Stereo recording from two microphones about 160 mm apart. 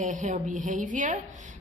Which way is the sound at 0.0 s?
50° right (ahead or behind).